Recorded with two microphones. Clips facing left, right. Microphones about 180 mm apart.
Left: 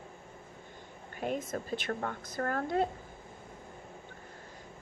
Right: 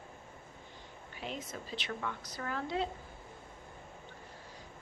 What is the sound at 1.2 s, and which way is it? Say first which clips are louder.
A woman's voice: left 8 dB; 50° left (ahead or behind).